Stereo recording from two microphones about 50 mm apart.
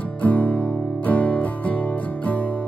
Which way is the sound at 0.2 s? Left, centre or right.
Left.